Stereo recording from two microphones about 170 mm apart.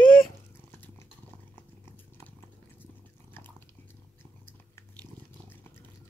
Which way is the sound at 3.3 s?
10° left (ahead or behind).